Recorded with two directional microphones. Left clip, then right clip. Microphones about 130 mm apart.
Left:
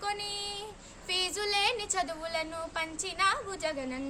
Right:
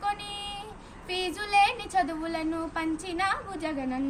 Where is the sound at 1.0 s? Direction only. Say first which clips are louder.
Left 1 dB; 45° left (ahead or behind).